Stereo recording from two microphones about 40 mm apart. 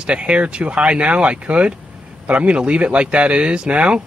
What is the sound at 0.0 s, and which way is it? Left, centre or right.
Speech, right.